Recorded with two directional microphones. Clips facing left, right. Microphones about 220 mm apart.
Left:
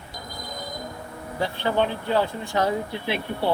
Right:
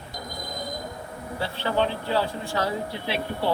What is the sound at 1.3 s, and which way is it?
Speech, 15° left (ahead or behind).